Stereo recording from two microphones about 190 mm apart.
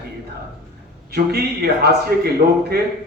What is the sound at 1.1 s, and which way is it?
A man's voice, 55° right (ahead or behind).